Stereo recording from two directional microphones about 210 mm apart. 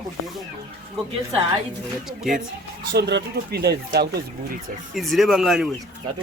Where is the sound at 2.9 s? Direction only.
55° right (ahead or behind).